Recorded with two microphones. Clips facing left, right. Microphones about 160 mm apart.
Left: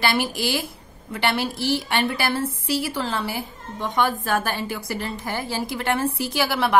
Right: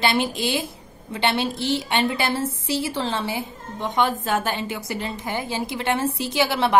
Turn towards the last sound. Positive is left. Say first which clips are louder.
# right 1 dB
turn(degrees=-25)  # may be behind; listen again after turning